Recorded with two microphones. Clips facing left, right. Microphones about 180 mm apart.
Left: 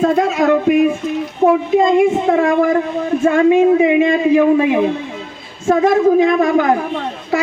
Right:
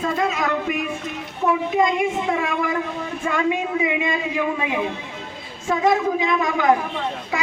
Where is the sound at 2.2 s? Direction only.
50° left (ahead or behind).